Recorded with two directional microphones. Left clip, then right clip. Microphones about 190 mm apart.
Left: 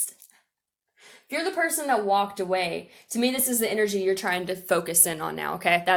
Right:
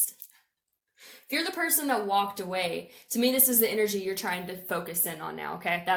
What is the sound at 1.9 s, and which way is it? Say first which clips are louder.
Speech: left 3 dB; 40° left (ahead or behind).